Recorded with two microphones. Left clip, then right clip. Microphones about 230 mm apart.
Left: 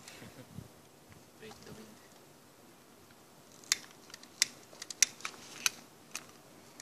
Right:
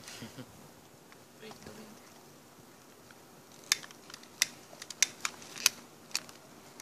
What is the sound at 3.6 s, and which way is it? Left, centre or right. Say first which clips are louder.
Camera: right 2 dB; centre.